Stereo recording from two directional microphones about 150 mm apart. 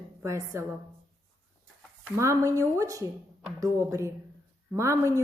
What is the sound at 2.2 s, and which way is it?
Speech, 20° right (ahead or behind).